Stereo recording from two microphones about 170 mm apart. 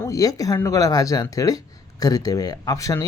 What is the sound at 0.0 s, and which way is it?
Speech, 20° left (ahead or behind).